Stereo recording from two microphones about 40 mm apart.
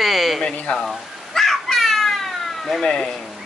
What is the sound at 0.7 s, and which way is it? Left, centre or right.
Speech, left.